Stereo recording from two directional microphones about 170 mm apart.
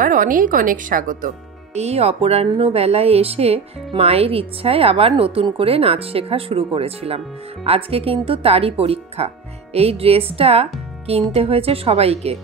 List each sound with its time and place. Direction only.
0.0 s speech: 50° right (ahead or behind)
1.8 s a woman's voice: 35° right (ahead or behind)